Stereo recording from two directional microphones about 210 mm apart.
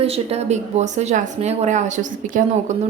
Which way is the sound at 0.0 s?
30° right (ahead or behind).